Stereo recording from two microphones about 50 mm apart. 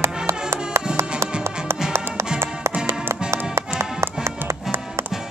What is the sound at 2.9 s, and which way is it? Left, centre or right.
Music, right.